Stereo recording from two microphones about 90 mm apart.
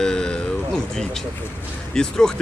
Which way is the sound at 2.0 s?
5° left (ahead or behind).